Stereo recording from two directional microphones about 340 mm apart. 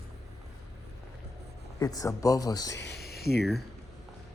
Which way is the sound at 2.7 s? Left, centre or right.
Left.